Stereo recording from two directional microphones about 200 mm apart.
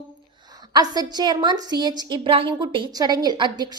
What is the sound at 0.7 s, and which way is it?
A woman's voice, 20° right (ahead or behind).